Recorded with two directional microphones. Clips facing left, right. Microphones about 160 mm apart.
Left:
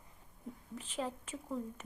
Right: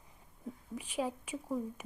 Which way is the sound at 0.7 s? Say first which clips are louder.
Right 4 dB; 10° right (ahead or behind).